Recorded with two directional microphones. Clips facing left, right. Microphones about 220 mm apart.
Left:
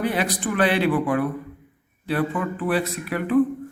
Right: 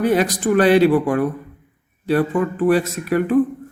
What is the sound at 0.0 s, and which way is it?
Speech, 45° right (ahead or behind).